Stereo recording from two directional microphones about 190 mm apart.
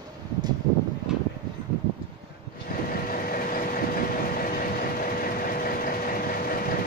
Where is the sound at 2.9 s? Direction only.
50° left (ahead or behind).